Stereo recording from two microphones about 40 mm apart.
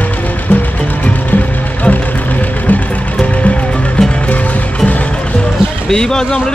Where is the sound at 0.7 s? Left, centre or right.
Left.